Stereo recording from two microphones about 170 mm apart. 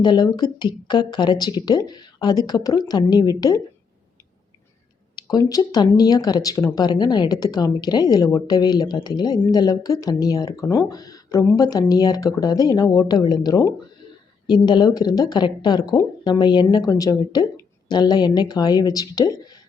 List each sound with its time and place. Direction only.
0.0 s a woman's voice: 25° left (ahead or behind)
5.1 s a woman's voice: 20° left (ahead or behind)